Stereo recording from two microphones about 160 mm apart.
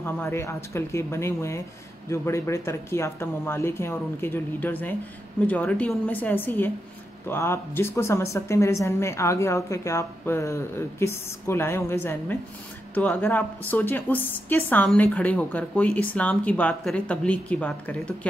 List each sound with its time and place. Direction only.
0.0 s a woman's voice: 15° left (ahead or behind)